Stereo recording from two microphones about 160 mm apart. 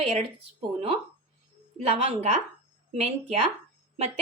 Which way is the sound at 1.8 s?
40° right (ahead or behind).